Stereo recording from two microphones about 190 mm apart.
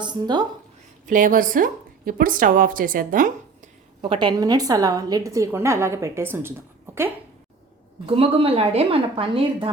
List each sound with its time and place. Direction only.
0.0 s a woman's voice: 20° right (ahead or behind)
1.0 s a woman's voice: 45° right (ahead or behind)
4.1 s a woman's voice: 25° right (ahead or behind)
8.0 s a woman's voice: 30° right (ahead or behind)